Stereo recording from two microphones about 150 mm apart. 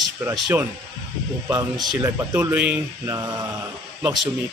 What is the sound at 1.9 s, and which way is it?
Speech, 20° right (ahead or behind).